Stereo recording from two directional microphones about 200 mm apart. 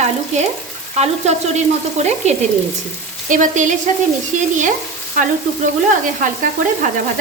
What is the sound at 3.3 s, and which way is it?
Speech, 40° right (ahead or behind).